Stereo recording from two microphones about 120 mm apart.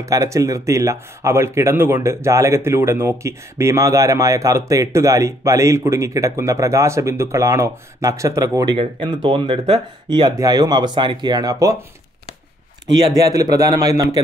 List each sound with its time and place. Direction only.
0.3 s speech: 25° right (ahead or behind)
8.7 s speech: 40° right (ahead or behind)
13.3 s speech: 30° right (ahead or behind)